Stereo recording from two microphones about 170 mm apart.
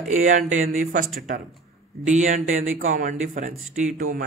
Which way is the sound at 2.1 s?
50° right (ahead or behind).